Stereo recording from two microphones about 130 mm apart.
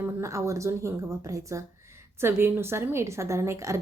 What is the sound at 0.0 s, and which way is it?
Speech, 25° right (ahead or behind).